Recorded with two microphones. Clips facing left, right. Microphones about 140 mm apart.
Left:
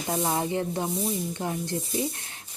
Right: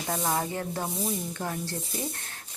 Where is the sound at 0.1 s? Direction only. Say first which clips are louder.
Left 3 dB; 20° left (ahead or behind).